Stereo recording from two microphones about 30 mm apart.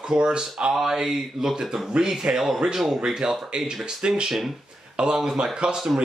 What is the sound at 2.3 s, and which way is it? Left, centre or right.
Speech, right.